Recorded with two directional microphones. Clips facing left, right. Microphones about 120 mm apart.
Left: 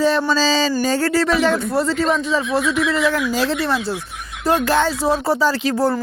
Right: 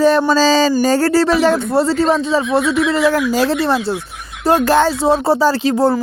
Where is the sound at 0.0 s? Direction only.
45° right (ahead or behind).